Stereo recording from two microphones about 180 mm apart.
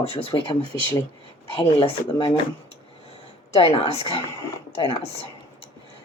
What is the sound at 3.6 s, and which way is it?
Speech, 35° left (ahead or behind).